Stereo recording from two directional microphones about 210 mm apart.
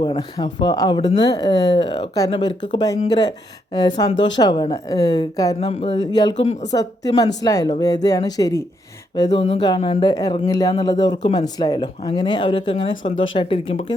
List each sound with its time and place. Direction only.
0.0 s a woman's voice: 20° left (ahead or behind)
5.5 s speech: 30° left (ahead or behind)
6.5 s a woman's voice: 35° left (ahead or behind)
6.7 s a woman's voice: 15° left (ahead or behind)
9.3 s speech: 30° left (ahead or behind)